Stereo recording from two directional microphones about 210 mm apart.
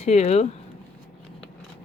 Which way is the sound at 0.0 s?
30° left (ahead or behind).